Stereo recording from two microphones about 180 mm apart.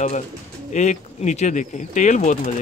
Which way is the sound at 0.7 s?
40° left (ahead or behind).